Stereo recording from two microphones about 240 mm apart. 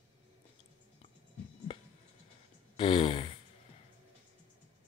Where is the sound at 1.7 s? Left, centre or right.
Left.